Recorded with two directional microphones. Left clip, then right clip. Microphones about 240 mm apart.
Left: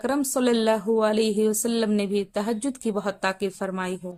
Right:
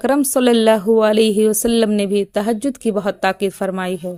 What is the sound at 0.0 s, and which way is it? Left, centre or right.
Speech, right.